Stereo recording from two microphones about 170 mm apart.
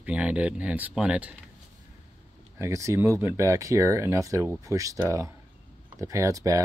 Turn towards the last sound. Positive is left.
turn(degrees=-20)  # may be behind; listen again after turning